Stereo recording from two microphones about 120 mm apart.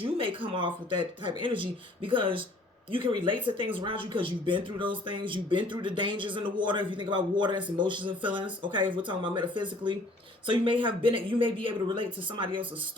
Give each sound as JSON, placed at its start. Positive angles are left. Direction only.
{"t": 0.0, "sound": "speech", "side_deg": -45}